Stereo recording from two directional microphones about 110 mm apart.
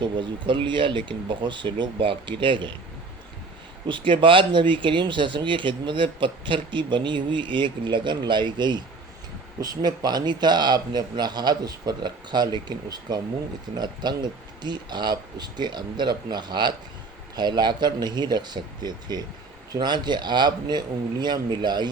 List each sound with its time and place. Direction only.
0.0 s speech: 45° right (ahead or behind)
3.8 s speech: 50° right (ahead or behind)